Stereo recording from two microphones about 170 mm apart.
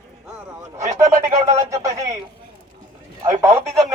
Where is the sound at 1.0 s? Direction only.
40° right (ahead or behind).